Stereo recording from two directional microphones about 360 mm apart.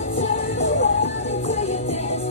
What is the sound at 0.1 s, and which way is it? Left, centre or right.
Music, centre.